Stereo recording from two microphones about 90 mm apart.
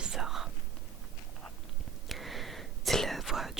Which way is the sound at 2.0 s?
Centre (ahead or behind).